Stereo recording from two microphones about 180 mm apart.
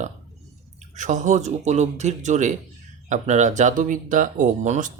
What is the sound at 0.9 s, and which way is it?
Speech, 45° right (ahead or behind).